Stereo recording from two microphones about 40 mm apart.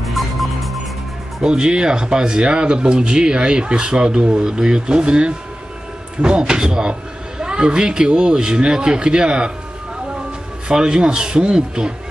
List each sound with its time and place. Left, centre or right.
0.0 s music: centre
1.4 s speech: centre
10.7 s speech: centre